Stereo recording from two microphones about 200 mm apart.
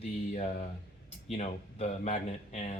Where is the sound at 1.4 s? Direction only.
35° left (ahead or behind).